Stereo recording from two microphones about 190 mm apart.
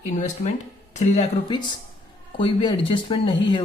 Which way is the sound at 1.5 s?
25° left (ahead or behind).